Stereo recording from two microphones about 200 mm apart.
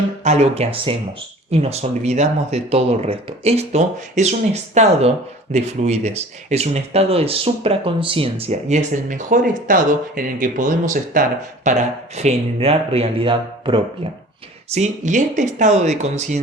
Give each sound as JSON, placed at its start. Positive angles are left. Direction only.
{"t": 0.3, "sound": "speech", "side_deg": -30}
{"t": 14.7, "sound": "speech", "side_deg": -35}